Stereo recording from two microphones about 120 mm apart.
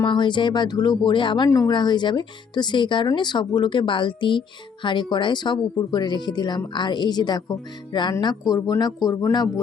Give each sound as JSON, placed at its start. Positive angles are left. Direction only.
{"t": 0.0, "sound": "speech", "side_deg": 40}
{"t": 1.5, "sound": "speech", "side_deg": 30}